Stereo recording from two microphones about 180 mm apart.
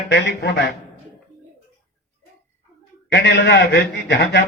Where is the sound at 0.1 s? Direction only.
70° left (ahead or behind).